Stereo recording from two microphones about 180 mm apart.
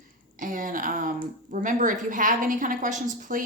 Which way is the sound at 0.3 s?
50° right (ahead or behind).